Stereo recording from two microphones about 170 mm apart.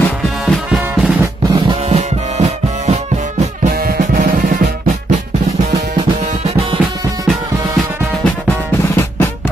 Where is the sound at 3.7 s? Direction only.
60° right (ahead or behind).